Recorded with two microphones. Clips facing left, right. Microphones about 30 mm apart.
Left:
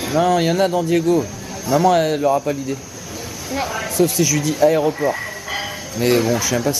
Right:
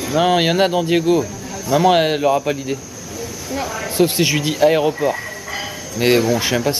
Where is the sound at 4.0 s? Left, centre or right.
Right.